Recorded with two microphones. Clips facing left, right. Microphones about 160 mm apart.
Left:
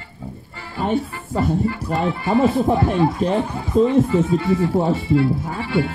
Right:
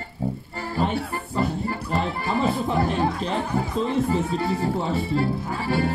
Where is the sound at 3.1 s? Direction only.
10° left (ahead or behind).